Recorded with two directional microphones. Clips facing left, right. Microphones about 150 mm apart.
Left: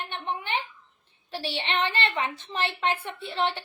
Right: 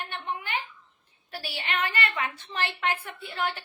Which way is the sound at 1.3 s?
25° left (ahead or behind).